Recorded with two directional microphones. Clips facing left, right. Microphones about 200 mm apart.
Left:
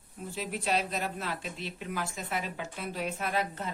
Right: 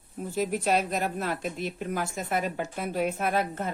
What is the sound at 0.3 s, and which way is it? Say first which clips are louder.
A woman's voice: right 6 dB; 45° right (ahead or behind).